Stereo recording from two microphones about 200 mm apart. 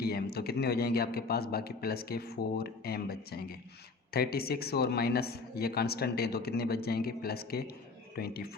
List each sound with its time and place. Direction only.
0.0 s a man's voice: 50° left (ahead or behind)